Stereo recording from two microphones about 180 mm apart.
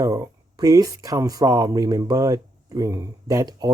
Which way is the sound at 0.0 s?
20° right (ahead or behind).